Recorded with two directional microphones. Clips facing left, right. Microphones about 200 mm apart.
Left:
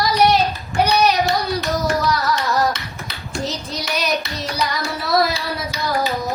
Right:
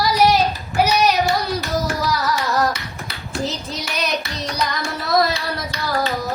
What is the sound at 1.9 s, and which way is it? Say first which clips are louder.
Carnatic music: left 2 dB; centre (ahead or behind).